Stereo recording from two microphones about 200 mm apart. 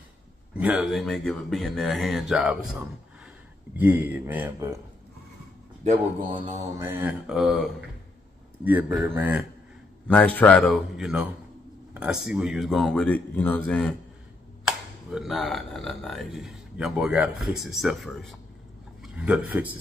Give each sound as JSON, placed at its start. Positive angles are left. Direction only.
{"t": 0.6, "sound": "speech", "side_deg": -5}
{"t": 5.9, "sound": "speech", "side_deg": -35}
{"t": 6.8, "sound": "speech", "side_deg": -10}
{"t": 10.0, "sound": "speech", "side_deg": 5}